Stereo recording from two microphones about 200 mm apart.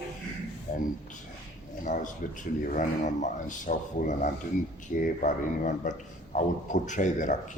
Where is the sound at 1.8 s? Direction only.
40° left (ahead or behind).